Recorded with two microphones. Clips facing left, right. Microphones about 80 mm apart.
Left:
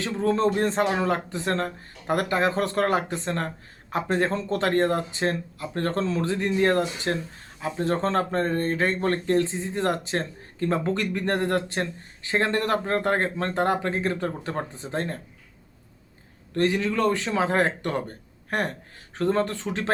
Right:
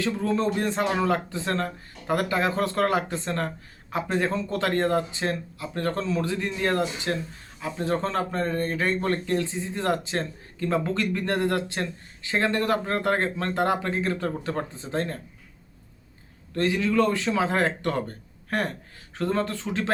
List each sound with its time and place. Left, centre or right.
0.0 s speech: left
4.1 s speech: left
9.4 s speech: left
16.6 s speech: left
19.1 s speech: left